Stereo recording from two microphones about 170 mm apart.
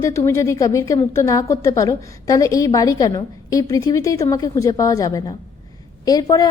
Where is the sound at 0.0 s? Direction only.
15° left (ahead or behind).